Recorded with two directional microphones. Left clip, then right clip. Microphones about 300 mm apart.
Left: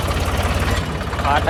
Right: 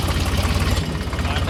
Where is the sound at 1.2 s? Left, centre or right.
Centre.